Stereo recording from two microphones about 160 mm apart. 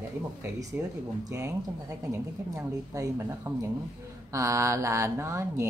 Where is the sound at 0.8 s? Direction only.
10° right (ahead or behind).